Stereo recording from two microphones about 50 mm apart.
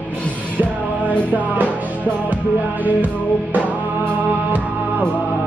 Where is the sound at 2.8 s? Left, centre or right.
Right.